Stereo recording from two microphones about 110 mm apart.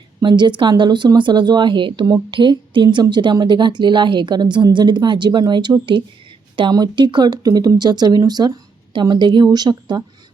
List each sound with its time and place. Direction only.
0.2 s a woman's voice: 45° right (ahead or behind)